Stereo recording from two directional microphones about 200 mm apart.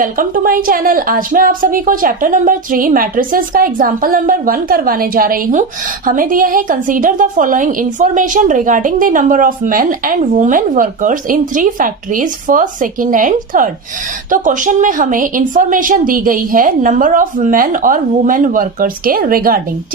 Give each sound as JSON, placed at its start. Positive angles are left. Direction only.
{"t": 0.0, "sound": "a woman's voice", "side_deg": -45}